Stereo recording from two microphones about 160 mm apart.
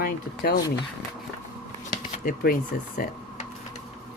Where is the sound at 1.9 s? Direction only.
65° left (ahead or behind).